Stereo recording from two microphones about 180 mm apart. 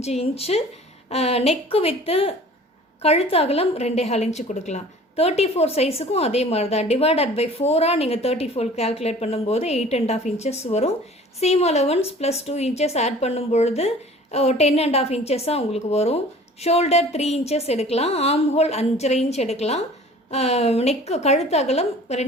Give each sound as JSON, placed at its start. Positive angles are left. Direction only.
{"t": 0.0, "sound": "a woman's voice", "side_deg": 35}